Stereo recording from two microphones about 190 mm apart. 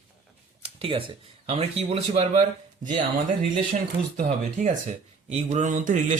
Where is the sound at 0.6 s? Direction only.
30° right (ahead or behind).